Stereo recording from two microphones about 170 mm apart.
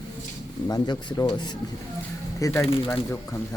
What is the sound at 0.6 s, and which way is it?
Speech, 25° left (ahead or behind).